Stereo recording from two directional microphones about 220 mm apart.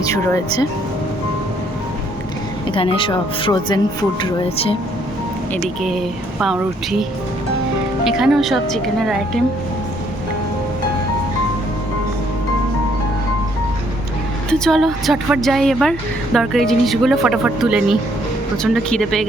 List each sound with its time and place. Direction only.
0.0 s speech: 15° left (ahead or behind)
2.7 s speech: 25° left (ahead or behind)
5.6 s speech: centre (ahead or behind)
8.0 s speech: centre (ahead or behind)
14.6 s speech: centre (ahead or behind)